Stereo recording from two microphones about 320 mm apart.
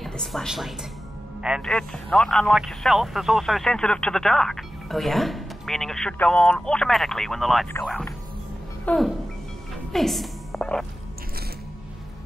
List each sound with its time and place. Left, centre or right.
0.0 s speech: centre
8.8 s music: centre
9.9 s a woman's voice: centre